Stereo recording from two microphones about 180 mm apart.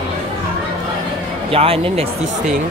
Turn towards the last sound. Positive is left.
turn(degrees=-35)  # may be behind; listen again after turning